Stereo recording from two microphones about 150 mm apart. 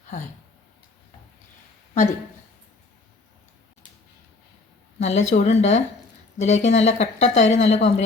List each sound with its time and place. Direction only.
4.9 s a woman's voice: 50° left (ahead or behind)